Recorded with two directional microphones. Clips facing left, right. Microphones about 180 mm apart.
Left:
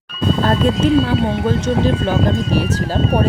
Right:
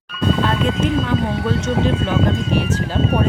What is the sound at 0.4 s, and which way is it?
Speech, 35° left (ahead or behind).